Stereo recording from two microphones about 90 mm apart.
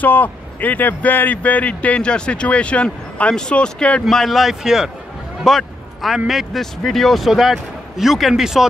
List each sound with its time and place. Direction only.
0.0 s speech: 20° left (ahead or behind)
4.0 s a man's voice: centre (ahead or behind)